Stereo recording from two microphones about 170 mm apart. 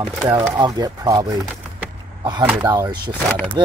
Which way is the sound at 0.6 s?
20° right (ahead or behind).